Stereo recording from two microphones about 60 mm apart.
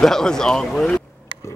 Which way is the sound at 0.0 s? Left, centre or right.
Centre.